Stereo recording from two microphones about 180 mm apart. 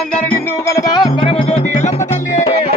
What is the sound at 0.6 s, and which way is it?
Music, 15° left (ahead or behind).